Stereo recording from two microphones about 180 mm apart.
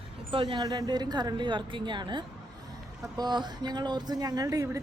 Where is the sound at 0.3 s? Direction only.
30° right (ahead or behind).